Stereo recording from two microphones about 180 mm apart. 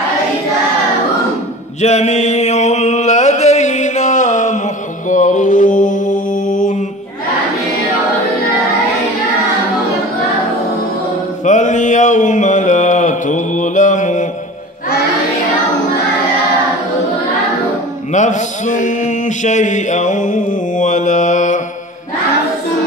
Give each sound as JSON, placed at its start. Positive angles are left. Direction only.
{"t": 1.8, "sound": "a sound", "side_deg": 40}
{"t": 5.1, "sound": "mantra", "side_deg": 45}
{"t": 11.4, "sound": "mantra", "side_deg": 45}
{"t": 18.1, "sound": "mantra", "side_deg": 45}